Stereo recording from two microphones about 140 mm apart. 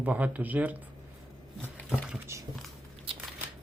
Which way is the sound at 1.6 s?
10° left (ahead or behind).